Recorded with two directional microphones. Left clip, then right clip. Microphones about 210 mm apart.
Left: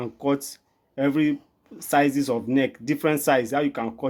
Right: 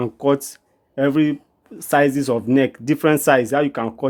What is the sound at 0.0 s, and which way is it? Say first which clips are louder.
Speech: right 7 dB; 35° right (ahead or behind).